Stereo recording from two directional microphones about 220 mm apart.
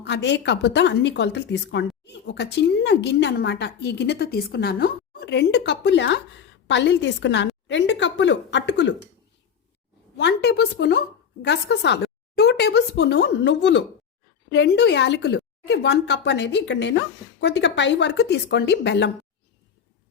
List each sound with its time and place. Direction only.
0.0 s speech: 50° left (ahead or behind)
10.2 s speech: 50° left (ahead or behind)